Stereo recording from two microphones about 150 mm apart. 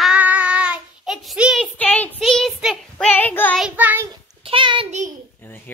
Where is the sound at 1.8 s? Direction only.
10° left (ahead or behind).